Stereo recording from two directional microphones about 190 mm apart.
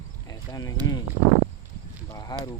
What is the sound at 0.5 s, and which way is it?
Speech, 20° left (ahead or behind).